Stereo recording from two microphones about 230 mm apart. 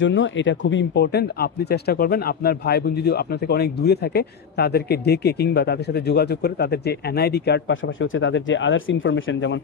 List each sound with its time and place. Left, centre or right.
0.0 s speech: left